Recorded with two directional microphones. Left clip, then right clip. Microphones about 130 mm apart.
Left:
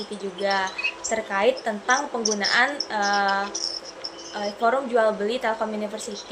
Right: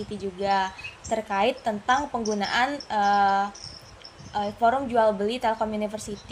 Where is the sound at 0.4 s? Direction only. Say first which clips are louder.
Left 1 dB; 35° right (ahead or behind).